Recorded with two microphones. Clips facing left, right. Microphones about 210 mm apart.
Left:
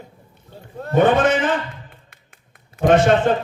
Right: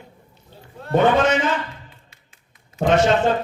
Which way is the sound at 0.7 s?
50° left (ahead or behind).